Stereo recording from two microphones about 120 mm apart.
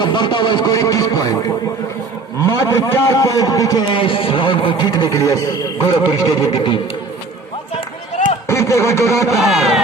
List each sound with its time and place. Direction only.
0.0 s speech: 40° left (ahead or behind)
2.4 s a man's voice: 25° left (ahead or behind)
3.8 s a man's voice: 45° left (ahead or behind)
8.4 s speech: 25° left (ahead or behind)
9.4 s speech: centre (ahead or behind)